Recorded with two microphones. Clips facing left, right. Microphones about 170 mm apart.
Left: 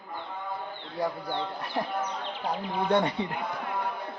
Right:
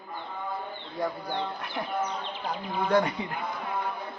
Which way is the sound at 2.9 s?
30° left (ahead or behind).